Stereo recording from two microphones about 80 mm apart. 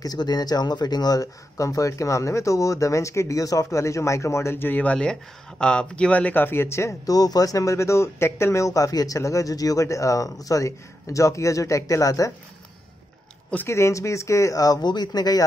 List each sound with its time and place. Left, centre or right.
0.0 s speech: left
7.2 s speech: left
13.7 s speech: left